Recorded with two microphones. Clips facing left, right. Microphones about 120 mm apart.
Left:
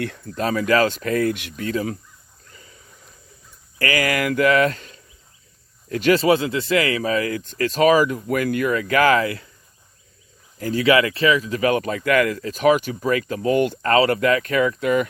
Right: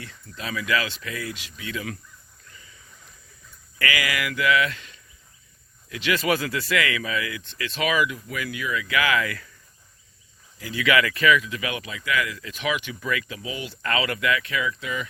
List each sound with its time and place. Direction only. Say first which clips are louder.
0.2 s speech: left 7 dB; 40° left (ahead or behind); by 1.6 s 60° left (ahead or behind)
1.6 s speech: left 8 dB; 35° left (ahead or behind)
2.5 s a sound: left 4 dB; 35° left (ahead or behind)
3.8 s speech: left 6 dB; 40° left (ahead or behind)
6.1 s speech: left 6 dB; 30° left (ahead or behind); by 9.2 s 45° left (ahead or behind)
9.2 s speech: left 6 dB; 30° left (ahead or behind)
10.6 s speech: left 5 dB; 40° left (ahead or behind)
13.8 s speech: left 5 dB; 40° left (ahead or behind)